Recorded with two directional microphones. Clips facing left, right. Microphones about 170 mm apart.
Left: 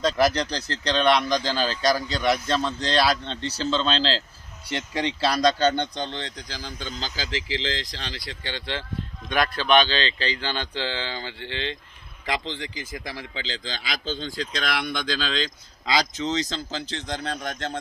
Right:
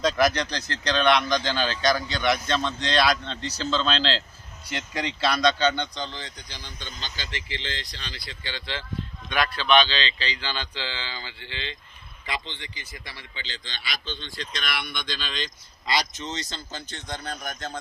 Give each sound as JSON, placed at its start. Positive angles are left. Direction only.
{"t": 0.2, "sound": "speech", "side_deg": 30}
{"t": 8.5, "sound": "speech", "side_deg": 55}
{"t": 12.2, "sound": "speech", "side_deg": 85}
{"t": 15.9, "sound": "speech", "side_deg": 90}
{"t": 17.4, "sound": "speech", "side_deg": 75}